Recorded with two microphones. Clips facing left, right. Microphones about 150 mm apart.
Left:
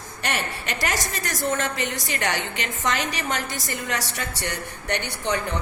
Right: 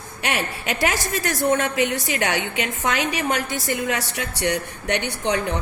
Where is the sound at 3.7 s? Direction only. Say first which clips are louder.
Right 5 dB; 70° right (ahead or behind).